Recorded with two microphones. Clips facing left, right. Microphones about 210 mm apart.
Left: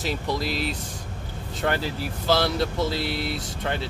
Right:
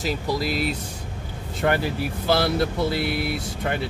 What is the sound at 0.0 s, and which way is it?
Speech, centre (ahead or behind).